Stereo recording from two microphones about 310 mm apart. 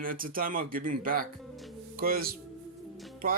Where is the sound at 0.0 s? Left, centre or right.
Right.